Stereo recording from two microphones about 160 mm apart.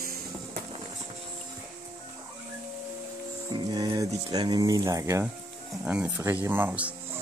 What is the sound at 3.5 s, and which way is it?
Music, 25° right (ahead or behind).